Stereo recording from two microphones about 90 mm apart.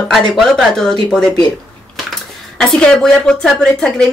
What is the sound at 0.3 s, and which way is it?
Speech, centre (ahead or behind).